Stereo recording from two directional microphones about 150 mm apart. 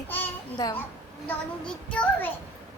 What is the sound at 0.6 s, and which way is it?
Speech, 20° left (ahead or behind).